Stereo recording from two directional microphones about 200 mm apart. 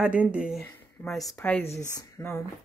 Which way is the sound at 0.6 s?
5° left (ahead or behind).